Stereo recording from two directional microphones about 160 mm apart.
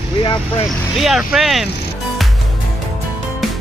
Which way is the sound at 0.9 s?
Centre (ahead or behind).